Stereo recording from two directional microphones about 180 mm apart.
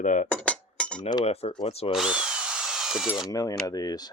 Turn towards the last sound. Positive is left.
turn(degrees=20)  # may be behind; listen again after turning